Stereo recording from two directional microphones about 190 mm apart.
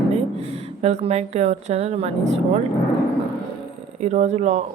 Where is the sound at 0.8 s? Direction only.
35° right (ahead or behind).